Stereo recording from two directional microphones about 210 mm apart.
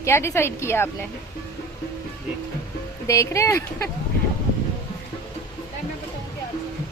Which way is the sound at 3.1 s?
15° left (ahead or behind).